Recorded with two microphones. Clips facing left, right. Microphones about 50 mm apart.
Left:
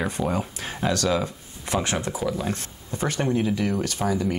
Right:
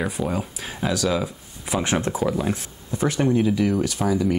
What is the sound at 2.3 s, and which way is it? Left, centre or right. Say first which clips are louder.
Speech: right 3 dB; centre.